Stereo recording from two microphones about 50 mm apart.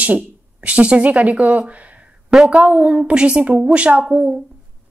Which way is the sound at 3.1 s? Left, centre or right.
Right.